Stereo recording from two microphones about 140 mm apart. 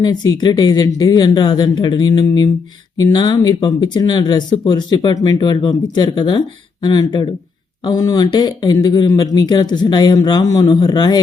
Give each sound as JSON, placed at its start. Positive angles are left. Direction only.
{"t": 0.0, "sound": "speech", "side_deg": 30}